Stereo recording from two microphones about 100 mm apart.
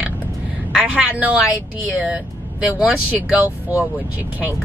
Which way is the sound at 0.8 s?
10° right (ahead or behind).